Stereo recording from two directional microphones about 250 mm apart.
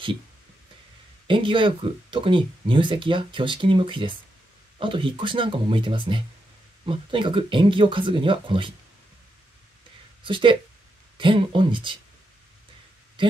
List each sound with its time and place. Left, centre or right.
1.2 s speech: centre
10.2 s speech: centre